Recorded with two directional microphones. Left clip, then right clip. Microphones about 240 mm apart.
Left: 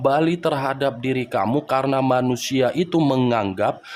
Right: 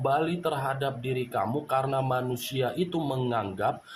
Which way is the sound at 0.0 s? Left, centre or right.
Left.